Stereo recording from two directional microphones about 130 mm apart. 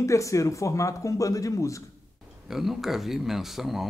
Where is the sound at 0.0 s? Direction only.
25° left (ahead or behind).